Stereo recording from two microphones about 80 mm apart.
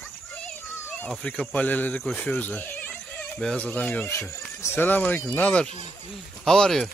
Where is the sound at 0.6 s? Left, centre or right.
Left.